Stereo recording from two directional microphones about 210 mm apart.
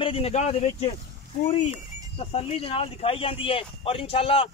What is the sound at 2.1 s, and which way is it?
Speech, 25° left (ahead or behind).